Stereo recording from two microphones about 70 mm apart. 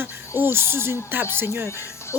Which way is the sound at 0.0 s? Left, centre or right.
Right.